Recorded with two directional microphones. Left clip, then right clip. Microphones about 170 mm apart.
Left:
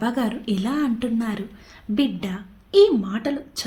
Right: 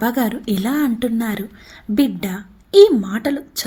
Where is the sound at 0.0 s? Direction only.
25° right (ahead or behind).